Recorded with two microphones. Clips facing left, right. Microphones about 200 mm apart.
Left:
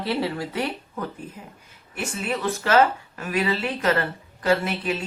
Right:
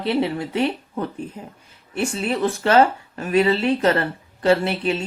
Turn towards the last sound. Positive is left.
turn(degrees=-30)  # may be behind; listen again after turning